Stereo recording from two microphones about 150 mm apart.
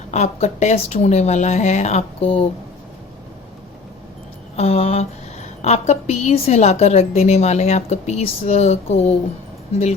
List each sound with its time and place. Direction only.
0.1 s a woman's voice: 50° left (ahead or behind)
4.5 s a woman's voice: 45° left (ahead or behind)